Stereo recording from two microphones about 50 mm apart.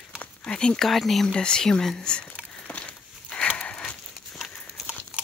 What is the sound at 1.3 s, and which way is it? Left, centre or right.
Speech, centre.